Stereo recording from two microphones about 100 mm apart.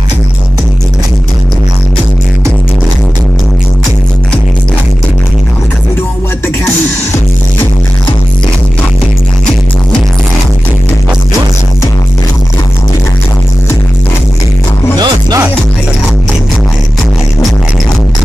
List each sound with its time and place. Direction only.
15.0 s music: 45° right (ahead or behind)